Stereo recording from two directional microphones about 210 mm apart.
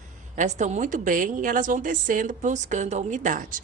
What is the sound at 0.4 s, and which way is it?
A woman's voice, 35° right (ahead or behind).